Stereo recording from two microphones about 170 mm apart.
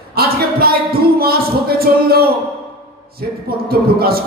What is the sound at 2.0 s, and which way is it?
A man's voice, 65° right (ahead or behind).